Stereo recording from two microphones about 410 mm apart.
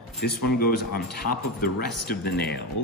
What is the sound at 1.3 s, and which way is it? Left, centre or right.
A man's voice, left.